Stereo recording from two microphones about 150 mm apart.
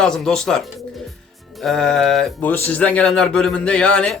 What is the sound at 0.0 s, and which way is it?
Speech, 5° left (ahead or behind).